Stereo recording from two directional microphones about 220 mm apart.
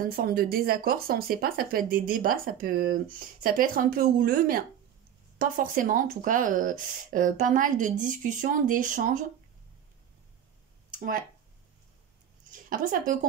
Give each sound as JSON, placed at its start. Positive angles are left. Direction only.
{"t": 0.0, "sound": "speech", "side_deg": -40}
{"t": 10.9, "sound": "speech", "side_deg": -40}
{"t": 12.4, "sound": "a woman's voice", "side_deg": -40}